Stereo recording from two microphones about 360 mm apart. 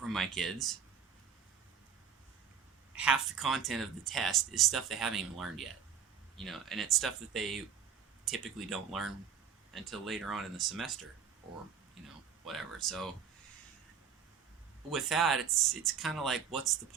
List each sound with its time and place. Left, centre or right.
0.0 s speech: centre
2.9 s speech: centre
12.0 s speech: centre
14.8 s speech: centre